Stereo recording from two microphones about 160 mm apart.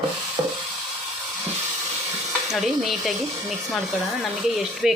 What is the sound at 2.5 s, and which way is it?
Speech, centre (ahead or behind).